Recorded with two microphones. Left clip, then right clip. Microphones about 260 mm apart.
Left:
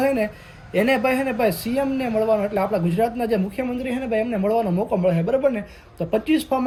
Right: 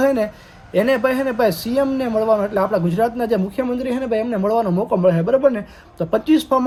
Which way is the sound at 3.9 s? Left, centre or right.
Right.